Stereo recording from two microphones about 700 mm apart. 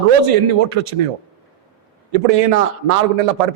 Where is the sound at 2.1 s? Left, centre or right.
Right.